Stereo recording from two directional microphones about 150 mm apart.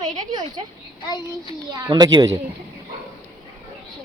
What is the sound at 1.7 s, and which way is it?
Speech, 25° right (ahead or behind).